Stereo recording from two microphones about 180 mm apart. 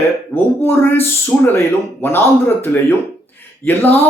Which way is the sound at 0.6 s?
10° left (ahead or behind).